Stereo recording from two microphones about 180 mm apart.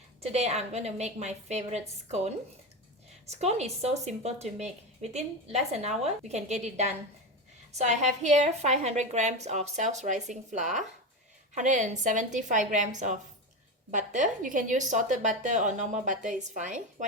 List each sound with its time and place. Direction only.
0.2 s a woman's voice: 35° right (ahead or behind)
13.9 s a woman's voice: 45° right (ahead or behind)